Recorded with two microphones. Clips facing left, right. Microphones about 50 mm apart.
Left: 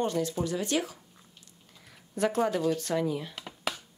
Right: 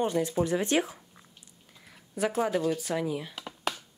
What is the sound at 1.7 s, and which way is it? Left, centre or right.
Speech, centre.